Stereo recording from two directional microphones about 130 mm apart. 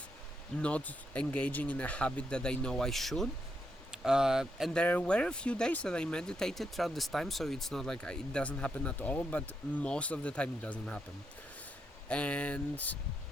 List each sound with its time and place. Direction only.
0.6 s speech: 10° left (ahead or behind)
4.7 s speech: 10° left (ahead or behind)
12.0 s speech: 10° left (ahead or behind)